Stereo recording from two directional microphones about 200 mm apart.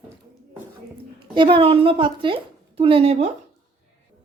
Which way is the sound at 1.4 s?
25° right (ahead or behind).